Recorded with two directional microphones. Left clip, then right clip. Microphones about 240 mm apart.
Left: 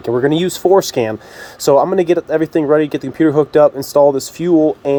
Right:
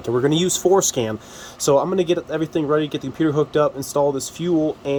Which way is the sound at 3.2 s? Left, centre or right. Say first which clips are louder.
Left 8 dB; left.